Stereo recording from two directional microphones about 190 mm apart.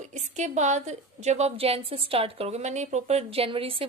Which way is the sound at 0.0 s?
40° right (ahead or behind).